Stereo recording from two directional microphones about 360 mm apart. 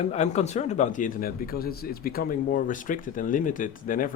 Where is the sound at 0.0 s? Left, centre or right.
Centre.